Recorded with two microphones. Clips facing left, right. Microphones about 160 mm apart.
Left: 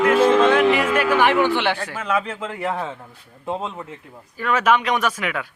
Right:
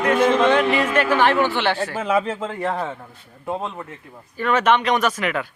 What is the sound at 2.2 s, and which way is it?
Speech, 5° right (ahead or behind).